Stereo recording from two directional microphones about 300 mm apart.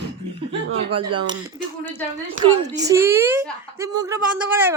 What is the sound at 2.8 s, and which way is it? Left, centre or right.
Speech, centre.